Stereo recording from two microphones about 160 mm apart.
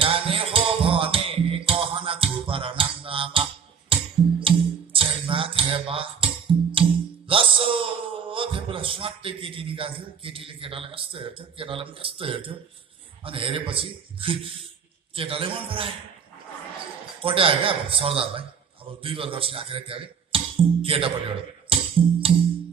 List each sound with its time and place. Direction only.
0.0 s music: 35° right (ahead or behind)
13.2 s a man's voice: 35° right (ahead or behind)
17.2 s a man's voice: 35° right (ahead or behind)